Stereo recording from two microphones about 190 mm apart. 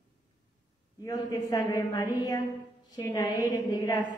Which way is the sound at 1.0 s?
15° left (ahead or behind).